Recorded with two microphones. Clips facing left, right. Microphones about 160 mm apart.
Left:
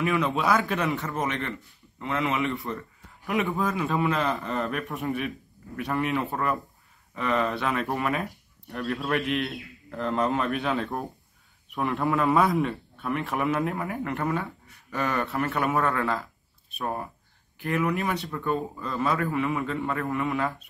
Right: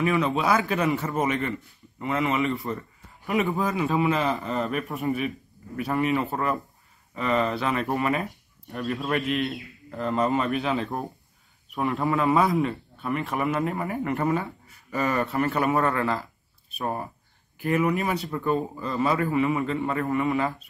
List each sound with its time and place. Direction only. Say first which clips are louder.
0.0 s a man's voice: right 2 dB; centre (ahead or behind)